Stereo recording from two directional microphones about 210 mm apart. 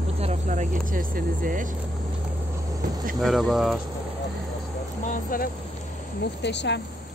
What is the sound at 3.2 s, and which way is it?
Speech, centre (ahead or behind).